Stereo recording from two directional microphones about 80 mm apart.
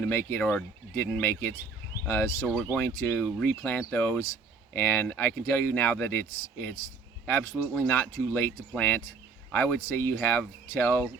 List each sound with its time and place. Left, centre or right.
0.0 s speech: left